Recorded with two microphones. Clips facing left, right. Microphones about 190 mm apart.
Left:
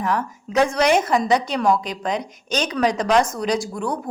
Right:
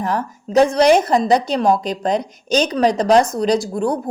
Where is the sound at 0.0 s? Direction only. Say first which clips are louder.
Right 2 dB; 35° right (ahead or behind).